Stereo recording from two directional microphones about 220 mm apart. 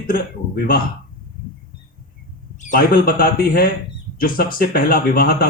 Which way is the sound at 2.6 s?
40° left (ahead or behind).